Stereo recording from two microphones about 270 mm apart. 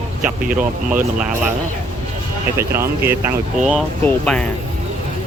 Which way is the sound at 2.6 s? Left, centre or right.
Centre.